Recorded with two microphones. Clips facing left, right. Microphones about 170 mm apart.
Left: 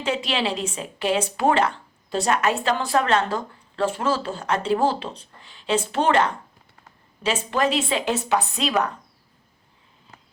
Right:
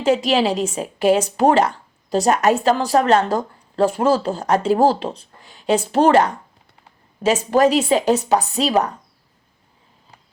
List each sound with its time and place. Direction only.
0.0 s speech: 45° right (ahead or behind)